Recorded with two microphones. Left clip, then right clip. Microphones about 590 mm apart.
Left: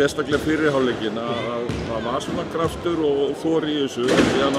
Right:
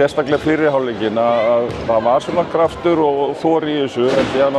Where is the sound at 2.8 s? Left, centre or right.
Right.